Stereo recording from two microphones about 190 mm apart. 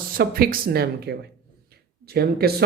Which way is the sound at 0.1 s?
50° right (ahead or behind).